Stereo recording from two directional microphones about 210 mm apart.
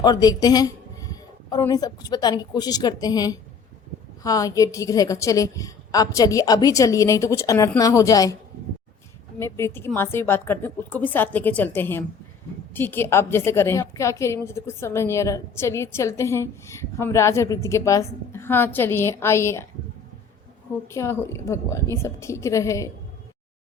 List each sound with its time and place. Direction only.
0.0 s a woman's voice: 20° left (ahead or behind)
9.4 s a woman's voice: 10° left (ahead or behind)
20.9 s a woman's voice: 15° left (ahead or behind)